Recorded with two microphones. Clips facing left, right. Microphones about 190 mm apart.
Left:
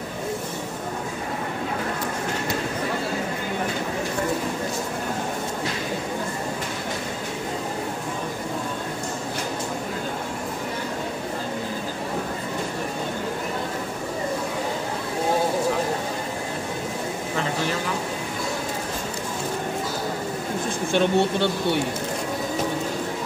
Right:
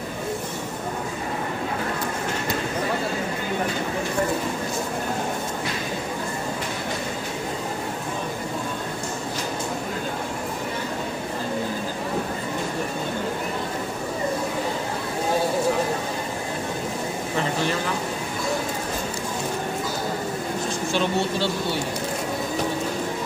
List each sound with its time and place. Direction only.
20.9 s speech: 55° left (ahead or behind)